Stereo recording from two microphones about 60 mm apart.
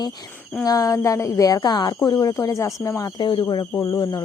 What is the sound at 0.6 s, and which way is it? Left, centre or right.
A woman's voice, left.